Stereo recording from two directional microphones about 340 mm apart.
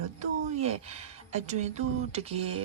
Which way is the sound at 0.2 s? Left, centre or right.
Centre.